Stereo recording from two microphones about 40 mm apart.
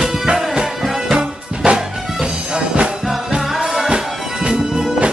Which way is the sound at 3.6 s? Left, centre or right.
Centre.